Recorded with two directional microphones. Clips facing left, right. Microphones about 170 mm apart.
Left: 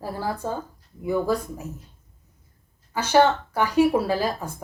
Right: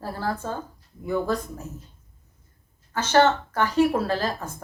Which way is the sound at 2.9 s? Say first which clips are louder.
Left 1 dB; 10° left (ahead or behind).